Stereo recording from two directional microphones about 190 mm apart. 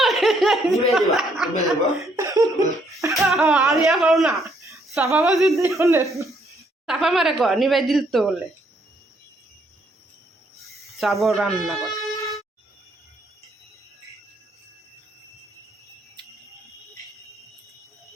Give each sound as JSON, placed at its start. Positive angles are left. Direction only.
{"t": 0.0, "sound": "laughter", "side_deg": 0}
{"t": 1.1, "sound": "speech", "side_deg": 0}
{"t": 2.1, "sound": "cough", "side_deg": -20}
{"t": 3.1, "sound": "speech", "side_deg": 0}
{"t": 6.8, "sound": "speech", "side_deg": 0}
{"t": 10.9, "sound": "speech", "side_deg": 0}